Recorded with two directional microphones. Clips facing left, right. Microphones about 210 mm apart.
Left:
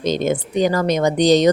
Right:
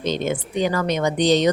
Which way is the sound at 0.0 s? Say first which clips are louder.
Left 4 dB; 40° left (ahead or behind).